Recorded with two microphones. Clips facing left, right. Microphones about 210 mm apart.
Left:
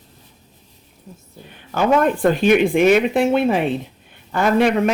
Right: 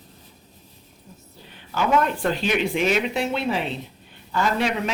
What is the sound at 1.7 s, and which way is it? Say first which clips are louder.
Speech: left 5 dB; 50° left (ahead or behind).